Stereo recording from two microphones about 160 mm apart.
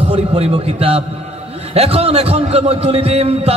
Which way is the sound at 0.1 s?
40° right (ahead or behind).